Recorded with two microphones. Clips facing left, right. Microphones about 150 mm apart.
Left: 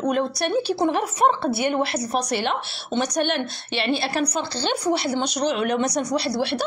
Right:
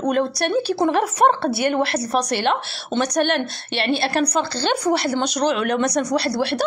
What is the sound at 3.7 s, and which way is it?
A woman's voice, 70° right (ahead or behind).